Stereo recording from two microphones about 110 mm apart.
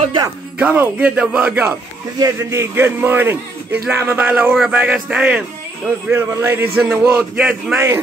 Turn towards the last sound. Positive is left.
turn(degrees=-10)  # may be behind; listen again after turning